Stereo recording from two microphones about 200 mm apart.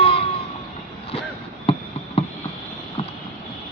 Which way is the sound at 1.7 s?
30° left (ahead or behind).